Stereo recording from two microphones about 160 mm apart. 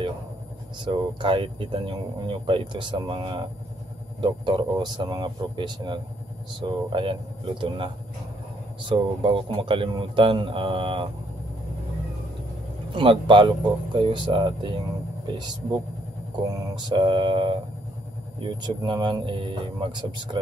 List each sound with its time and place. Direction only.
0.8 s speech: 30° right (ahead or behind)
12.9 s speech: 30° right (ahead or behind)